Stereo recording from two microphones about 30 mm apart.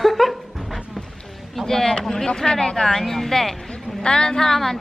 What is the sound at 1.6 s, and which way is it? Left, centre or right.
Speech, centre.